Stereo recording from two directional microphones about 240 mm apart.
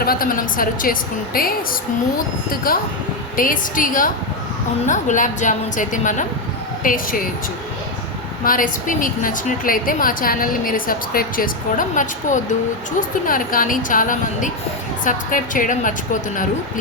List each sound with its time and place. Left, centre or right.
0.0 s a woman's voice: left
2.7 s a woman's voice: left
8.4 s a woman's voice: left